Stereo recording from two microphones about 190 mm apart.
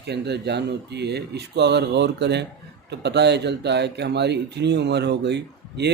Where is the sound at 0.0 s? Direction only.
60° right (ahead or behind).